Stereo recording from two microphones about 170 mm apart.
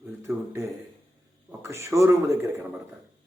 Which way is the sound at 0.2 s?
15° right (ahead or behind).